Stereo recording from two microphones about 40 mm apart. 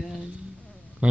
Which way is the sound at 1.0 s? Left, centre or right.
Right.